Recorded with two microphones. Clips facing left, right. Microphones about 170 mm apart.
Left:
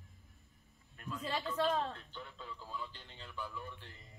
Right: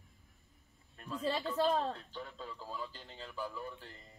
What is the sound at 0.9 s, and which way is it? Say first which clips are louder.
Speech: right 4 dB; 35° right (ahead or behind).